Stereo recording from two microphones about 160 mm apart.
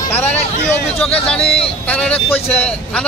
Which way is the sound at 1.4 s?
35° left (ahead or behind).